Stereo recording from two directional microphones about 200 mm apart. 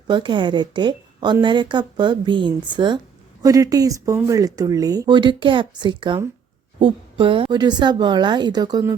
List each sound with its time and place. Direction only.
0.1 s a woman's voice: 25° right (ahead or behind)